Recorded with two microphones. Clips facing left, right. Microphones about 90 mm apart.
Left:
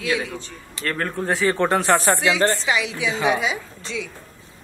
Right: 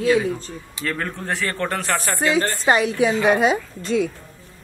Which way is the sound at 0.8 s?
Centre (ahead or behind).